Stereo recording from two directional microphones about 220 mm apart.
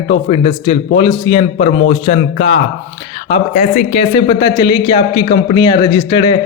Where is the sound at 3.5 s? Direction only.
35° left (ahead or behind).